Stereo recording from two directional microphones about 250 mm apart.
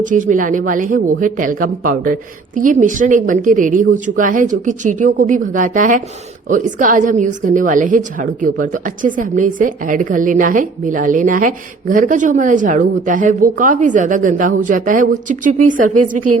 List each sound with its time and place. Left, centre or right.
0.0 s a woman's voice: right
16.0 s a woman's voice: right